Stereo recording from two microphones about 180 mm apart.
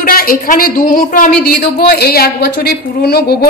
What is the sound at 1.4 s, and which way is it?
A woman's voice, 65° left (ahead or behind).